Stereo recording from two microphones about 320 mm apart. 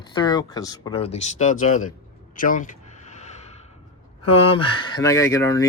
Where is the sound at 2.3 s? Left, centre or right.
Left.